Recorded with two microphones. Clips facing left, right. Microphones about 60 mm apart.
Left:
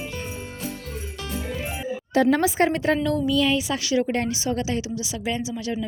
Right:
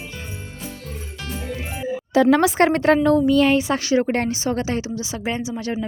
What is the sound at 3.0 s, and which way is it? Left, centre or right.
A woman's voice, right.